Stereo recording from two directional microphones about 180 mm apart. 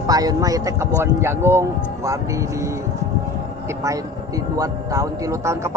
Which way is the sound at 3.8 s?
20° right (ahead or behind).